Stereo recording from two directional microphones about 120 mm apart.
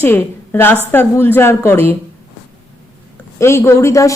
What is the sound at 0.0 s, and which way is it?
A woman's voice, 20° left (ahead or behind).